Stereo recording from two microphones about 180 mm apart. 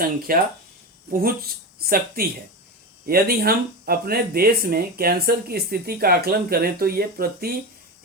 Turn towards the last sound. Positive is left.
turn(degrees=-55)  # may be behind; listen again after turning